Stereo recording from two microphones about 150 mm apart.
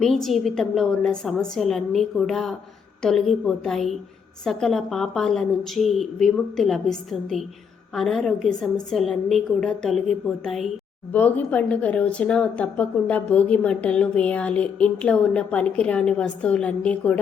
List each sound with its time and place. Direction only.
0.0 s a woman's voice: centre (ahead or behind)
11.1 s speech: 10° left (ahead or behind)